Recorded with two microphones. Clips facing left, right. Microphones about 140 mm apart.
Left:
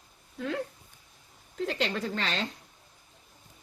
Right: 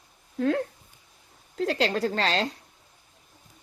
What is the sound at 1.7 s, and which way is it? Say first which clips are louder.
Speech: right 6 dB; 90° right.